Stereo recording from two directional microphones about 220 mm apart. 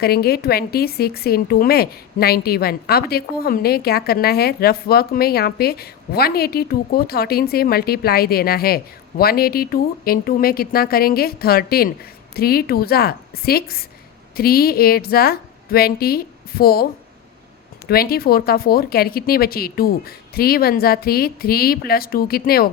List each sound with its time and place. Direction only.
0.0 s a woman's voice: 45° left (ahead or behind)
17.8 s a woman's voice: 45° left (ahead or behind)